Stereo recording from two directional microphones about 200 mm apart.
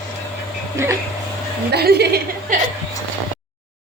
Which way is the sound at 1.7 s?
55° right (ahead or behind).